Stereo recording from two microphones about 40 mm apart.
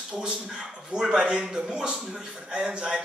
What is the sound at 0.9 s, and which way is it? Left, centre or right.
A man's voice, centre.